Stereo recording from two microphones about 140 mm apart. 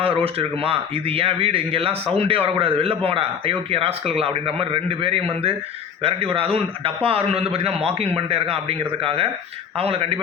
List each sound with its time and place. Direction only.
0.0 s a man's voice: 40° right (ahead or behind)